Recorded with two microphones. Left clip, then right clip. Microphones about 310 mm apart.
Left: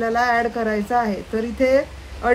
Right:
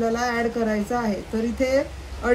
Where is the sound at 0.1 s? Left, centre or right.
Left.